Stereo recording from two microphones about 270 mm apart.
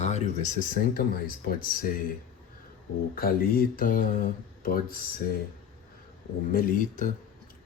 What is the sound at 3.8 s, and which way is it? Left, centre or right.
Speech, left.